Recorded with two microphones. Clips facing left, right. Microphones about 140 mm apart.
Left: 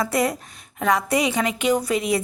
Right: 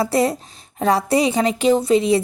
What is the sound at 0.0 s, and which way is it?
A woman's voice, 30° right (ahead or behind).